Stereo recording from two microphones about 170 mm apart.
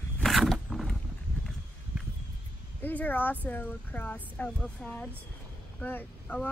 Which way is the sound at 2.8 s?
10° left (ahead or behind).